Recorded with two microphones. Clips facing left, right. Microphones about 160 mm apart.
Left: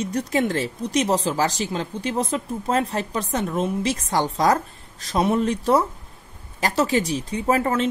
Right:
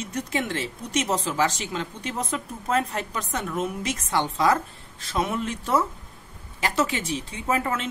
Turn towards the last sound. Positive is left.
turn(degrees=35)  # may be behind; listen again after turning